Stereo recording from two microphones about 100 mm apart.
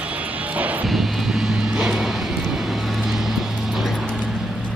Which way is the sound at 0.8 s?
Centre (ahead or behind).